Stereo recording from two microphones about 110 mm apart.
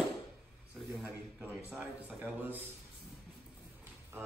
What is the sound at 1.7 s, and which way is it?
Speech, 15° right (ahead or behind).